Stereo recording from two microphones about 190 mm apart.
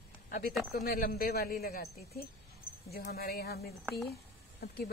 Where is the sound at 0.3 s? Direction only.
50° left (ahead or behind).